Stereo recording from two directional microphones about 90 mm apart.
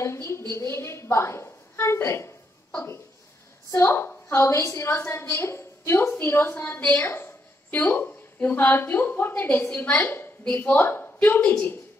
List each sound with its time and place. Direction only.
0.0 s a woman's voice: 30° left (ahead or behind)
0.5 s a sound: 30° left (ahead or behind)
3.7 s a woman's voice: 25° left (ahead or behind)